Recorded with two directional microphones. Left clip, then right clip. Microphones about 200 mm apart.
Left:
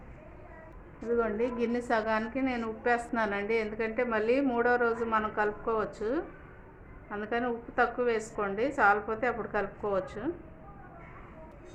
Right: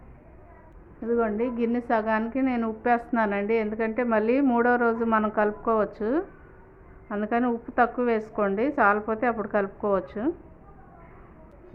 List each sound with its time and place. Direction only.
1.1 s a woman's voice: 35° right (ahead or behind)